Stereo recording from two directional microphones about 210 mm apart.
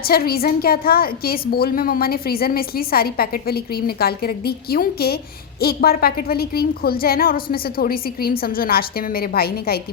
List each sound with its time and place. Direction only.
0.0 s a woman's voice: 45° left (ahead or behind)